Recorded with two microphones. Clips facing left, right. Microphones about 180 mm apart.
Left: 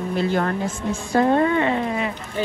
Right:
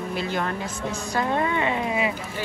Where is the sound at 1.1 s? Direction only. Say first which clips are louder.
Left 7 dB; 45° left (ahead or behind).